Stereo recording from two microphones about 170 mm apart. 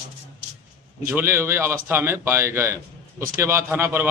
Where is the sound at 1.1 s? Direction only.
15° right (ahead or behind).